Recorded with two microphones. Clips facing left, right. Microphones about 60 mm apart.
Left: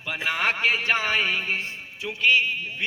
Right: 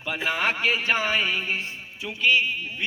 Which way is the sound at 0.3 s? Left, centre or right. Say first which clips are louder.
Left 1 dB; left.